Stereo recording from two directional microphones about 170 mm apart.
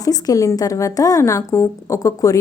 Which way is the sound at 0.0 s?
20° left (ahead or behind).